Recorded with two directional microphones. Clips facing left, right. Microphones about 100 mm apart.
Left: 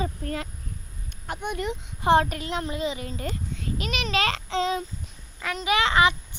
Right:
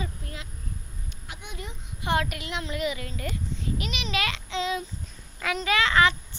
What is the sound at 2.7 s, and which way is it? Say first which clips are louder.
Speech: left 1 dB; 25° left (ahead or behind).